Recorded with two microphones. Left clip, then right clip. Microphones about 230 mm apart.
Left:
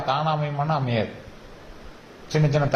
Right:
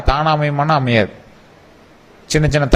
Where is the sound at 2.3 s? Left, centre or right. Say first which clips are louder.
Right 7 dB; right.